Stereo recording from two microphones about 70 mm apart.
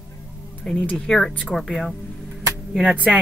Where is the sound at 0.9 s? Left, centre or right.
Centre.